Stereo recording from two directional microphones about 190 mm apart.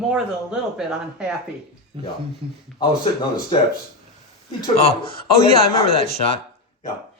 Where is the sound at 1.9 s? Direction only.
25° right (ahead or behind).